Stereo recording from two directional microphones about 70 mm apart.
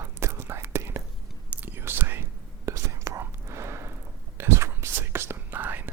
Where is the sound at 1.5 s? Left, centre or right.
Right.